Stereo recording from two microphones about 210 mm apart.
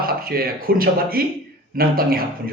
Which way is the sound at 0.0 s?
45° right (ahead or behind).